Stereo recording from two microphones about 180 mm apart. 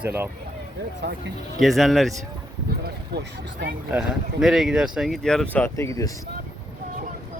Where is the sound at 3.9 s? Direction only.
Centre (ahead or behind); by 6.1 s 20° left (ahead or behind).